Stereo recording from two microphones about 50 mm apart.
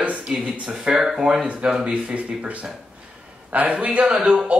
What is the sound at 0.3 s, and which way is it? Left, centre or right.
Speech, centre.